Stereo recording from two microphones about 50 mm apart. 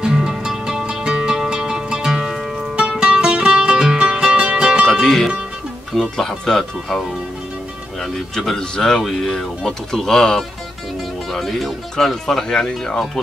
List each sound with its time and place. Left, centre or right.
0.0 s music: centre
3.0 s music: centre
5.0 s music: centre
6.1 s speech: centre
8.0 s speech: centre